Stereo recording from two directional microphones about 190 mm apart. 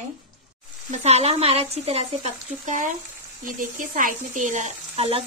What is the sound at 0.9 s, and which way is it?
Speech, 35° right (ahead or behind).